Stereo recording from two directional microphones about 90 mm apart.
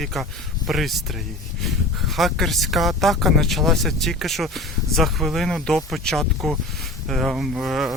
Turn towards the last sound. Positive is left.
turn(degrees=0)  # may be behind; listen again after turning